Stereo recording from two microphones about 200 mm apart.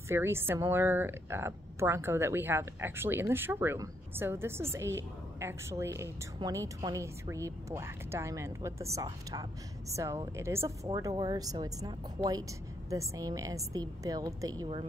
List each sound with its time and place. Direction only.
0.1 s a woman's voice: 10° right (ahead or behind)